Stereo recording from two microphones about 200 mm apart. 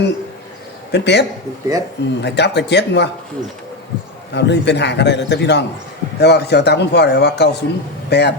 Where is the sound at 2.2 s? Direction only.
60° left (ahead or behind).